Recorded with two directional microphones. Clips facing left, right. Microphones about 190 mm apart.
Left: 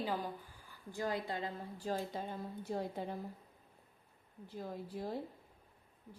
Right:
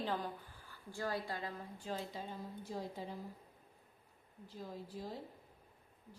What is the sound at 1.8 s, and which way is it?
Speech, 45° left (ahead or behind).